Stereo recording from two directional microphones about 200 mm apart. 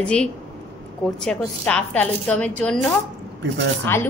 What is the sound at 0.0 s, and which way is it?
A woman's voice, 5° left (ahead or behind).